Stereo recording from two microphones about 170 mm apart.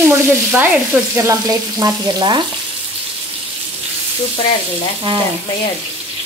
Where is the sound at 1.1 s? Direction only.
15° right (ahead or behind).